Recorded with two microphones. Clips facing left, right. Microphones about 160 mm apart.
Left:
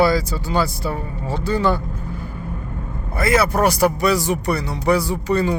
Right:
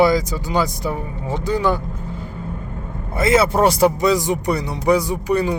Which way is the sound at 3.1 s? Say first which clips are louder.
Right 2 dB; 20° right (ahead or behind).